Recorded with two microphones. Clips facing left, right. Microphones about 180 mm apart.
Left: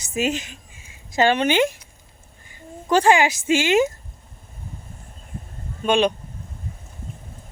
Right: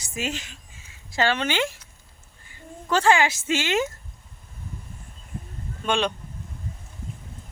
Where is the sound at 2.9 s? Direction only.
15° left (ahead or behind).